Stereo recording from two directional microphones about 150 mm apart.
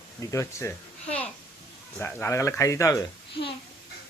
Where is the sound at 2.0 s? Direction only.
15° left (ahead or behind).